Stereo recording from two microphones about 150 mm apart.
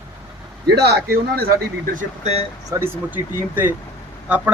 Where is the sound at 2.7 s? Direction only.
15° right (ahead or behind).